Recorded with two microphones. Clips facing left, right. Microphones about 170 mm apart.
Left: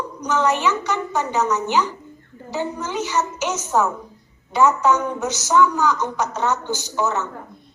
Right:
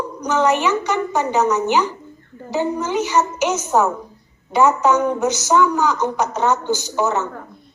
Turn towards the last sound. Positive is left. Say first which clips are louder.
# right 3 dB
turn(degrees=-15)  # may be behind; listen again after turning